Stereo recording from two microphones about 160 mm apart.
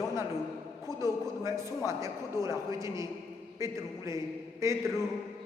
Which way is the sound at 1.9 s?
20° right (ahead or behind).